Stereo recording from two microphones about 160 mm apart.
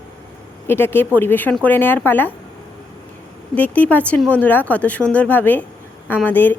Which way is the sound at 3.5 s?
10° left (ahead or behind).